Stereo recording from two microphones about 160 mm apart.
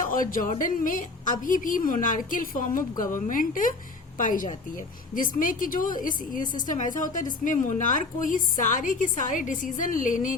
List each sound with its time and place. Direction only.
0.0 s a woman's voice: 60° left (ahead or behind)